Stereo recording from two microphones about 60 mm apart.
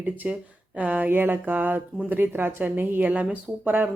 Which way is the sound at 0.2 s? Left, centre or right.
Centre.